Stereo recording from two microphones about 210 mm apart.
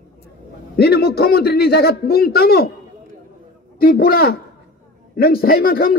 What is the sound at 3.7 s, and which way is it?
A man's voice, 45° left (ahead or behind).